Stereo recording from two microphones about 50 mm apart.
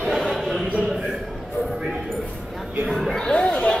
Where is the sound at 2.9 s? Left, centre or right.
Centre.